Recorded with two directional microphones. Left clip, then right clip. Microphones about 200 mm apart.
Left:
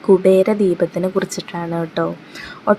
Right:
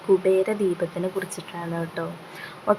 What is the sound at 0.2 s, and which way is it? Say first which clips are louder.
Speech: left 8 dB; 15° left (ahead or behind).